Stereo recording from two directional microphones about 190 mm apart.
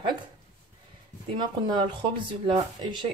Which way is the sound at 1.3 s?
25° right (ahead or behind).